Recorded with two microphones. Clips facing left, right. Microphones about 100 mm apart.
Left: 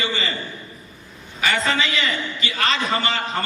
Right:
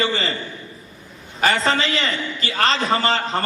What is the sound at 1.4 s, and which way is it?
A man's voice, 35° right (ahead or behind).